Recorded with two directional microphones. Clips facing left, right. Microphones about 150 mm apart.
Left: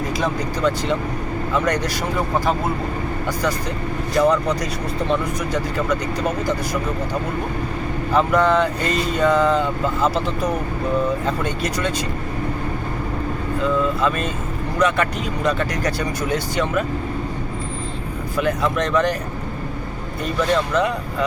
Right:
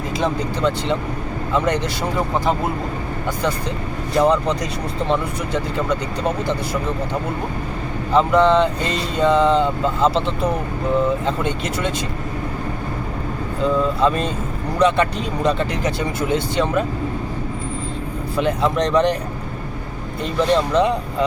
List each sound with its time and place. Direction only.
0.2 s speech: 25° right (ahead or behind)
4.2 s speech: 30° right (ahead or behind)
5.7 s speech: 30° right (ahead or behind)
8.1 s speech: 25° right (ahead or behind)
13.6 s speech: 30° right (ahead or behind)
18.3 s speech: 30° right (ahead or behind)
20.2 s speech: 30° right (ahead or behind)